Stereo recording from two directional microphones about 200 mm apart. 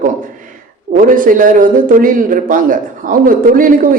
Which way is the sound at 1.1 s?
45° right (ahead or behind).